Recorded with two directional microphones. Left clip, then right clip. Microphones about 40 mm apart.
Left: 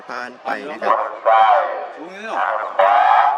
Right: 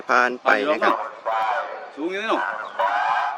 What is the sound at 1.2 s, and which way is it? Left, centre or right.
Speech, left.